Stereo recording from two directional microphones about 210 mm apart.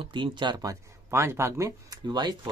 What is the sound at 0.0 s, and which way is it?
Speech, 20° right (ahead or behind).